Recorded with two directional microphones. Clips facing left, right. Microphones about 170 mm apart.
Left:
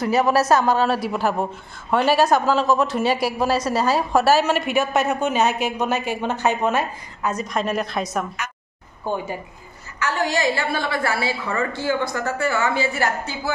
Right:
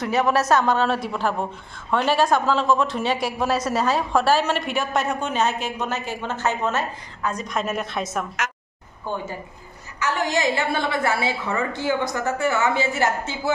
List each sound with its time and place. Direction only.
0.0 s speech: 5° left (ahead or behind)
9.1 s speech: 15° left (ahead or behind)
9.9 s a woman's voice: 20° right (ahead or behind)